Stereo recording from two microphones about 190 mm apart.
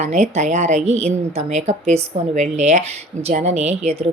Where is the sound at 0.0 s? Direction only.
35° right (ahead or behind).